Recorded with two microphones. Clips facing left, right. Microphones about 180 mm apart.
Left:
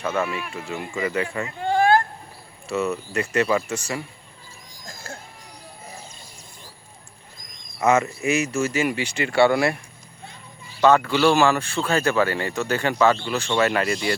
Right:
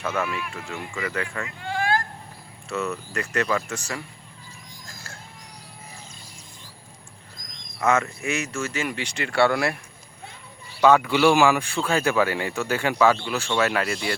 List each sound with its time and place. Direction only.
0.1 s speech: 25° left (ahead or behind)
0.5 s speech: 15° left (ahead or behind)
1.5 s a sound: 35° left (ahead or behind)
2.6 s speech: 10° left (ahead or behind)
7.9 s speech: 5° left (ahead or behind)
10.8 s speech: 10° right (ahead or behind)